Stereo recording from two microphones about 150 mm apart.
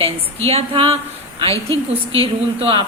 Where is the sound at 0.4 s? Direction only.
40° right (ahead or behind).